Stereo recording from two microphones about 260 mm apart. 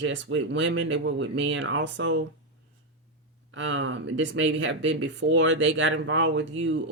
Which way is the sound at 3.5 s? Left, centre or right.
Right.